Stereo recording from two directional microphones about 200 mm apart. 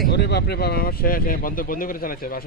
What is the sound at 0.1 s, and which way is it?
Speech, 55° left (ahead or behind).